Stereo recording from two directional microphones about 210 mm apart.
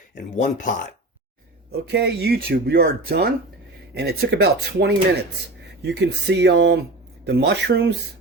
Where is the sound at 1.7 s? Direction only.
50° right (ahead or behind).